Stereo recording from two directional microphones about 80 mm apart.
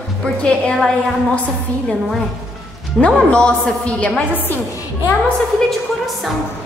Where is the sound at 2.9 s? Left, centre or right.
Centre.